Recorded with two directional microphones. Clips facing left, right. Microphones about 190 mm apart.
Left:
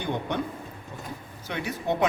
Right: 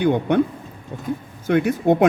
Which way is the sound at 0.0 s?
60° right (ahead or behind).